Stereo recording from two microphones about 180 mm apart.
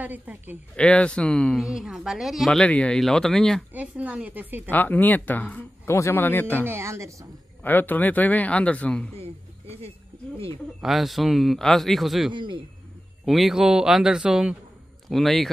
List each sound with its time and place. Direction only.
0.0 s a woman's voice: 10° right (ahead or behind)
0.7 s speech: 5° left (ahead or behind)
3.7 s a woman's voice: 10° right (ahead or behind)
4.6 s speech: 10° left (ahead or behind)
6.7 s a woman's voice: 15° right (ahead or behind)
7.6 s speech: 10° left (ahead or behind)
9.1 s a sound: 35° right (ahead or behind)
10.8 s speech: centre (ahead or behind)
12.3 s speech: 25° right (ahead or behind)
13.2 s speech: centre (ahead or behind)